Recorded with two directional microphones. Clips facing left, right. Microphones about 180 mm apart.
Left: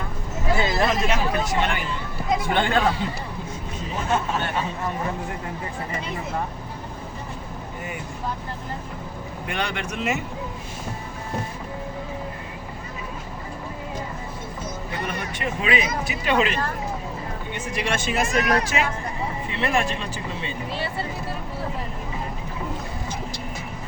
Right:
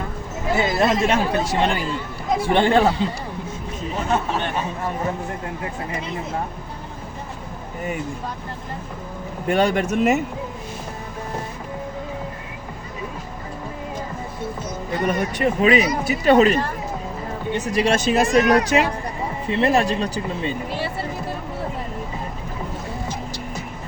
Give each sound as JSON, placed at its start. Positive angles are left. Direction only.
{"t": 0.5, "sound": "speech", "side_deg": -20}
{"t": 9.5, "sound": "speech", "side_deg": -40}
{"t": 15.0, "sound": "speech", "side_deg": -40}
{"t": 17.6, "sound": "speech", "side_deg": -35}